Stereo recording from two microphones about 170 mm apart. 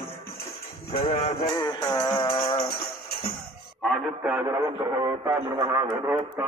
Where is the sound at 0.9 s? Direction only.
40° left (ahead or behind).